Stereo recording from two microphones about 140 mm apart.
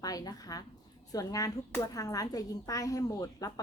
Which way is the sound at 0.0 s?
25° left (ahead or behind).